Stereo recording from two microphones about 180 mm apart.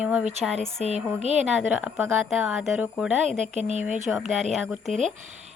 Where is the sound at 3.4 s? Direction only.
40° right (ahead or behind).